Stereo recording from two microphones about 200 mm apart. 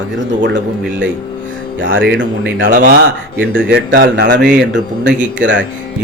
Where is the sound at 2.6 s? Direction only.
45° right (ahead or behind).